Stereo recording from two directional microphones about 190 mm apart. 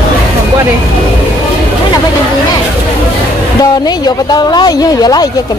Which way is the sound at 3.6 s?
20° left (ahead or behind).